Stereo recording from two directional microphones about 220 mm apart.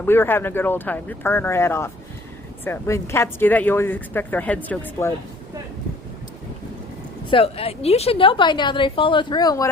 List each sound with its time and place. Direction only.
0.0 s speech: 10° left (ahead or behind)
7.3 s a woman's voice: 25° left (ahead or behind)